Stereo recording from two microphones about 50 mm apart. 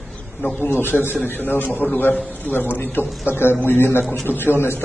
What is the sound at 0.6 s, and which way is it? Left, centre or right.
A man's voice, left.